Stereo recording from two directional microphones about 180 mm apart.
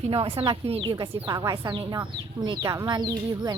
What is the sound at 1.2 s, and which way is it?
Speech, 20° right (ahead or behind).